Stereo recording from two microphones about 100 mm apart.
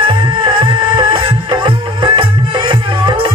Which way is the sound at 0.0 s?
60° right (ahead or behind).